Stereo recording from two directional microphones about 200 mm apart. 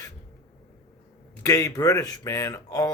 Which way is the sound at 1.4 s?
15° left (ahead or behind).